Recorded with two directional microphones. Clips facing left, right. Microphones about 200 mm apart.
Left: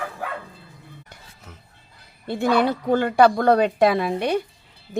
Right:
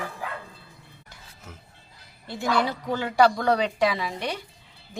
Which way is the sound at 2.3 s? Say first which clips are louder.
Left 6 dB; 55° left (ahead or behind).